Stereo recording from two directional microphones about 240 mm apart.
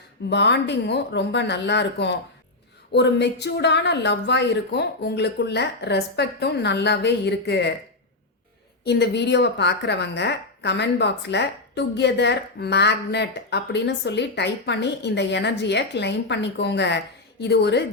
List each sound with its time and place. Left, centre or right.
0.3 s a woman's voice: left
8.8 s a woman's voice: left